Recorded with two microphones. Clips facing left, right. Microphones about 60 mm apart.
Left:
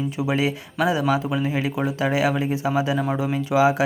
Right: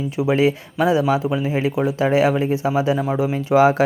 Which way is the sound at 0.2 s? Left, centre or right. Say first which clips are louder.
Right 6 dB; right.